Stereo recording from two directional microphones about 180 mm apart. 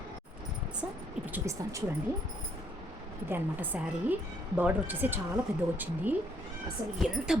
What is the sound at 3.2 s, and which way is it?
A woman's voice, 10° right (ahead or behind).